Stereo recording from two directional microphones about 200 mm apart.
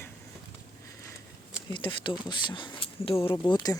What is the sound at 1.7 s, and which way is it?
Speech, 25° left (ahead or behind).